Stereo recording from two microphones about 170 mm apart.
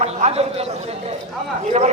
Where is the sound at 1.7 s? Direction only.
45° right (ahead or behind).